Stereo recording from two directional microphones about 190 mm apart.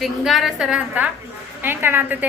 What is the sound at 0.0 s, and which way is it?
A woman's voice, centre (ahead or behind).